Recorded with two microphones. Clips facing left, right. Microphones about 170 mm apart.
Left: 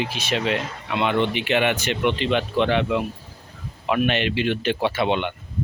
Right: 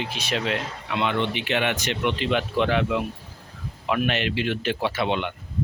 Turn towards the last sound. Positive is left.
turn(degrees=0)  # may be behind; listen again after turning